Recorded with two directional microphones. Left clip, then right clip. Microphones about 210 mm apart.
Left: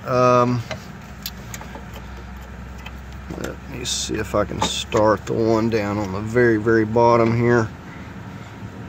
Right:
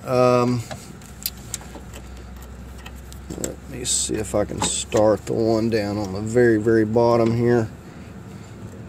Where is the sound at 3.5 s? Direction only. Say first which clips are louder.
Even; 5° right (ahead or behind).